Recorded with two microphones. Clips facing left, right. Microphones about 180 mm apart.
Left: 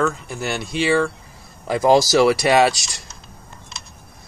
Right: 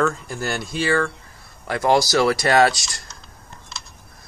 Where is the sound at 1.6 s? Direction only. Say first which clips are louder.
Left 3 dB; 20° left (ahead or behind).